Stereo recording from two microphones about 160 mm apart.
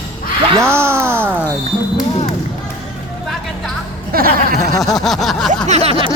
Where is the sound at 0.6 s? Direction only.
15° right (ahead or behind).